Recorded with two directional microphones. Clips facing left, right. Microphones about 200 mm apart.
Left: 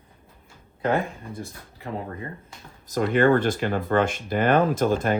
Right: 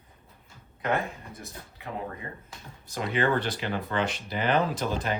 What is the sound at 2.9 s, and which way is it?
Speech, 45° left (ahead or behind).